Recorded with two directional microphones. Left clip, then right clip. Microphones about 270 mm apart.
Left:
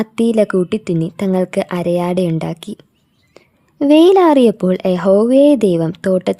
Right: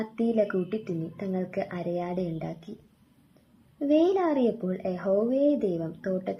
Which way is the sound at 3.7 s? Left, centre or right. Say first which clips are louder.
Left 14 dB; left.